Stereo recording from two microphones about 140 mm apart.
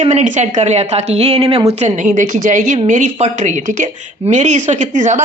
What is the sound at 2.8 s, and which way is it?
Speech, 55° right (ahead or behind).